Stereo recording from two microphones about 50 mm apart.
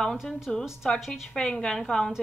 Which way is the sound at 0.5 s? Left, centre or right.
Centre.